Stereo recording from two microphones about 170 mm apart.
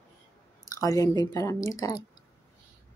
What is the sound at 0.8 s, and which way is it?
Speech, 20° left (ahead or behind).